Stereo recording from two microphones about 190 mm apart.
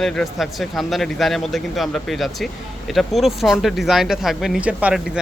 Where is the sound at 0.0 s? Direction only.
Centre (ahead or behind).